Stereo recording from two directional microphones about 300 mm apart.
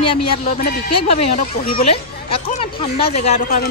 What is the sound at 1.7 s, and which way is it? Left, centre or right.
A woman's voice, left.